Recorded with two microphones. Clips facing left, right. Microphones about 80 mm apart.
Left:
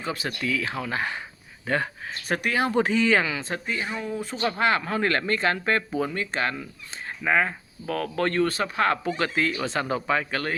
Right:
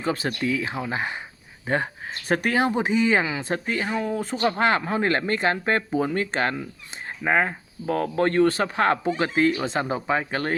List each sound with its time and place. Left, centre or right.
0.0 s speech: right
2.3 s speech: right
2.7 s speech: centre
3.7 s speech: right
4.4 s speech: right